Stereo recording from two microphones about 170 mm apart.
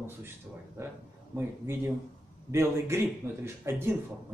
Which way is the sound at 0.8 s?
15° right (ahead or behind).